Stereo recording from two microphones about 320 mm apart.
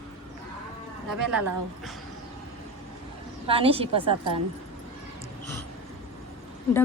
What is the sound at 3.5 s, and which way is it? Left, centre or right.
Speech, centre.